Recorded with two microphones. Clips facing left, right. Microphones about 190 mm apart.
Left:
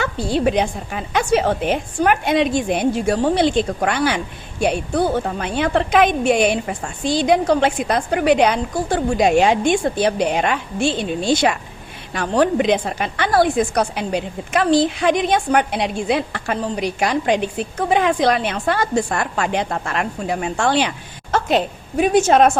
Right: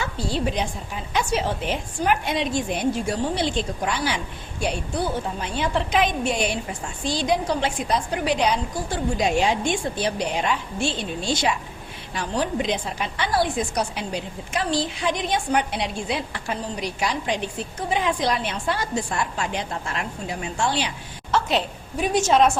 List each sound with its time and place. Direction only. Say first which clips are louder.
0.0 s a woman's voice: left 7 dB; 60° left (ahead or behind)